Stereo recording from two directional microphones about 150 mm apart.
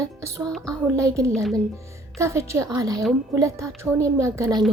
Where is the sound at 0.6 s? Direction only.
20° right (ahead or behind).